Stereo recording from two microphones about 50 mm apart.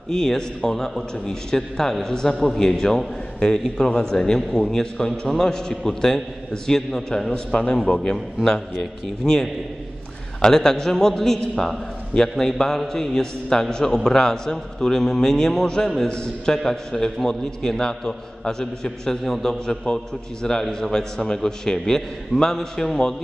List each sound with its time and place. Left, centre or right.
0.1 s a man's voice: centre
4.4 s a man's voice: centre